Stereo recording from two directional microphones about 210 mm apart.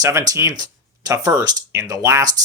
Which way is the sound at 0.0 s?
15° right (ahead or behind).